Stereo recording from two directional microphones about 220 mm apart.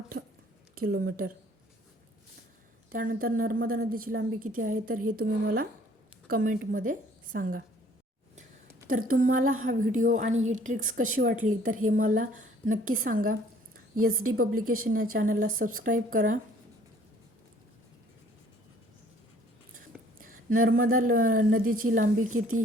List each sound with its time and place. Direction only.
0.1 s a sound: 50° right (ahead or behind)
0.8 s a woman's voice: 40° right (ahead or behind)
2.9 s a woman's voice: 40° right (ahead or behind)
4.9 s speech: 90° right
5.2 s a woman's voice: 40° right (ahead or behind)
9.1 s a woman's voice: 40° right (ahead or behind)
19.7 s a woman's voice: 40° right (ahead or behind)